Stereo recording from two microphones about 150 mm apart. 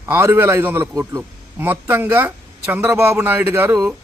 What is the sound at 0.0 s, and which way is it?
A man's voice, 15° right (ahead or behind).